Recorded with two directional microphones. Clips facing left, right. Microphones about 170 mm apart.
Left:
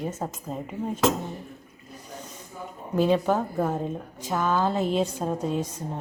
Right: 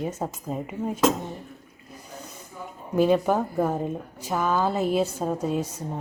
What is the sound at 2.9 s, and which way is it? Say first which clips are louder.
A woman's voice: right 2 dB; 10° right (ahead or behind).